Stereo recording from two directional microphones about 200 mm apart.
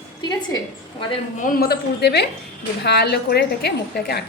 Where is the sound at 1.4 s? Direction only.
45° left (ahead or behind).